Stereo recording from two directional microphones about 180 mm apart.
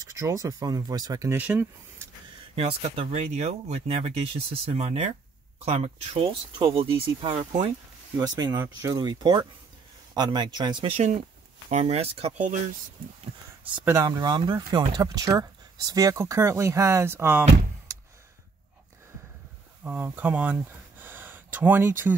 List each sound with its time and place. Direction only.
0.0 s speech: 15° right (ahead or behind)
2.5 s speech: 35° right (ahead or behind)
8.2 s speech: 20° right (ahead or behind); by 12.5 s 40° right (ahead or behind)
13.8 s speech: 20° right (ahead or behind)
19.8 s speech: 10° right (ahead or behind)